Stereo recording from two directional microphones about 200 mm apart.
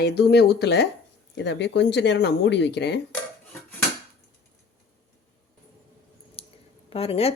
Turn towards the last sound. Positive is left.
turn(degrees=30)  # may be behind; listen again after turning